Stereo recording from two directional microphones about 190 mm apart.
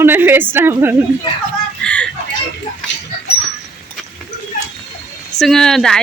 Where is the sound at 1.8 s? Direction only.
5° left (ahead or behind).